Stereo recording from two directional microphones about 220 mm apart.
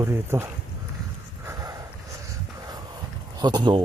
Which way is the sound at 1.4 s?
15° right (ahead or behind).